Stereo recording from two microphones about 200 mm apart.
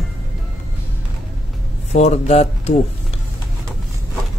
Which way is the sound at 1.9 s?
35° left (ahead or behind).